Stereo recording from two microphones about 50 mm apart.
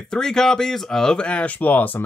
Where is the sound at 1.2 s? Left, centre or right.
Left.